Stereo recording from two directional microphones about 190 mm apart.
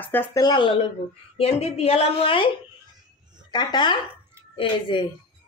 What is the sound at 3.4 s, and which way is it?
Speech, 25° left (ahead or behind).